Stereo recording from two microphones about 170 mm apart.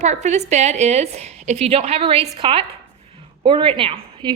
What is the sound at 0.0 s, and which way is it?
A woman's voice, 45° right (ahead or behind).